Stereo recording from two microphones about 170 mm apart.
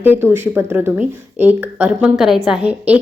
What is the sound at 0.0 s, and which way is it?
A woman's voice, 10° right (ahead or behind).